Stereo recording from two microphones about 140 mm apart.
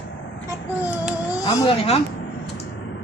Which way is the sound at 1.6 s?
45° left (ahead or behind).